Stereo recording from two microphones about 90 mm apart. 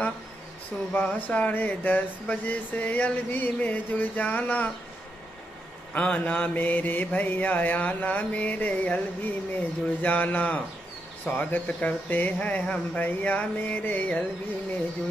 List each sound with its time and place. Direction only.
0.9 s speech: 15° left (ahead or behind)
5.9 s speech: 15° left (ahead or behind)